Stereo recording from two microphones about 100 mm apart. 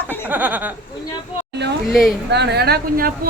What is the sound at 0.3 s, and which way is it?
Speech, 15° right (ahead or behind).